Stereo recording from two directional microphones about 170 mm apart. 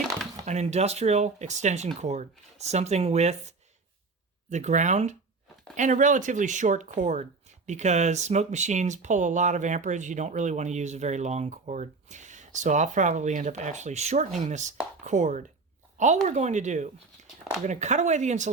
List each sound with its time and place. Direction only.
0.4 s speech: 40° right (ahead or behind)